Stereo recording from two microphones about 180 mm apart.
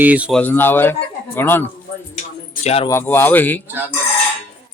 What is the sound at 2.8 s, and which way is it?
Speech, 15° left (ahead or behind).